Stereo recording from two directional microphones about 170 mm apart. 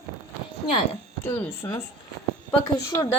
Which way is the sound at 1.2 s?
10° left (ahead or behind).